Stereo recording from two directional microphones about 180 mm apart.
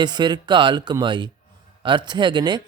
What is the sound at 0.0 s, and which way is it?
A man's voice, 25° right (ahead or behind).